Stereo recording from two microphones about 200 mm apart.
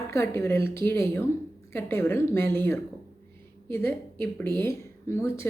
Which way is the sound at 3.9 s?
10° left (ahead or behind).